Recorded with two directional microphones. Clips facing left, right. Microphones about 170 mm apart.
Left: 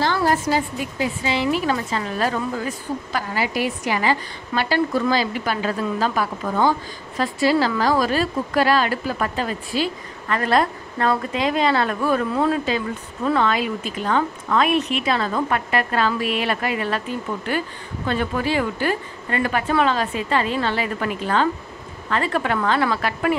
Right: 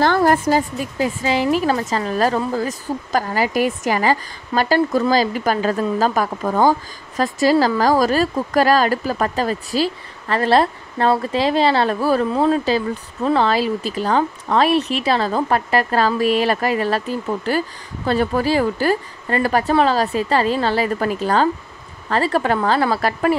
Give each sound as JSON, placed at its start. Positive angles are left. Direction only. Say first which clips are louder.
{"t": 0.0, "sound": "speech", "louder": "right 5 dB", "side_deg": -50}